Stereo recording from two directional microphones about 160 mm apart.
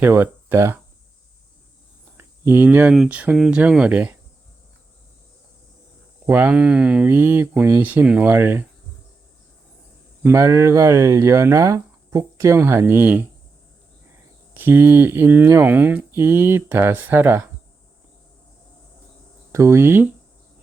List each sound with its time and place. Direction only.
0.0 s speech: 15° right (ahead or behind)
2.1 s speech: 15° right (ahead or behind)
6.2 s speech: 10° right (ahead or behind)
10.2 s speech: 15° right (ahead or behind)
14.6 s speech: 15° right (ahead or behind)
19.5 s speech: 20° right (ahead or behind)